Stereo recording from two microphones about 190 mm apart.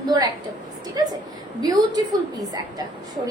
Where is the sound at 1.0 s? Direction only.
20° right (ahead or behind).